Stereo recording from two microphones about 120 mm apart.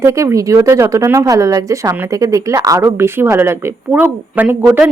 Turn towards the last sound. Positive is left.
turn(degrees=-10)  # may be behind; listen again after turning